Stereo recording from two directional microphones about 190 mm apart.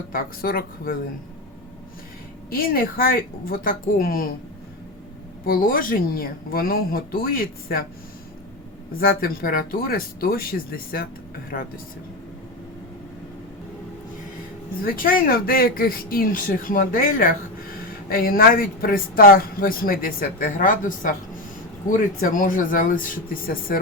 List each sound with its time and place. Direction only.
0.1 s speech: 50° left (ahead or behind)
2.5 s speech: 50° left (ahead or behind)
5.5 s speech: 50° left (ahead or behind)
8.9 s speech: 50° left (ahead or behind)
14.8 s speech: 50° left (ahead or behind)